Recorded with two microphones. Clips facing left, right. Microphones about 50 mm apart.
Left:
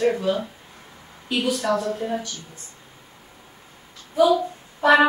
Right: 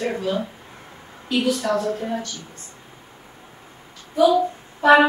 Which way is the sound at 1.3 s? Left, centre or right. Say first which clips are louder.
Right 2 dB; centre.